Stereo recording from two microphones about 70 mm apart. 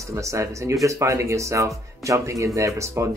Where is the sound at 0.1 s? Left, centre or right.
Right.